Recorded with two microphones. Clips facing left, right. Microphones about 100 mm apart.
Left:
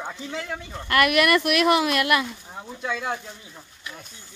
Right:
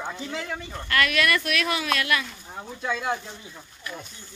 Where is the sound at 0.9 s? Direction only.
25° left (ahead or behind).